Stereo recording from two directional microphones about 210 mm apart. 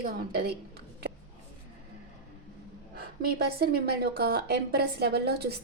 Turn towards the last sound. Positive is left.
turn(degrees=-50)  # may be behind; listen again after turning